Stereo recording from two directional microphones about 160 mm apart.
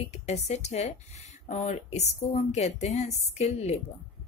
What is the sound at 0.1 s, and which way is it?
A woman's voice, 45° left (ahead or behind).